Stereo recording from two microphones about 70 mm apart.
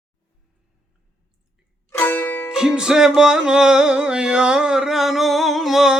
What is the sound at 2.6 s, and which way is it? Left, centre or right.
Music, centre.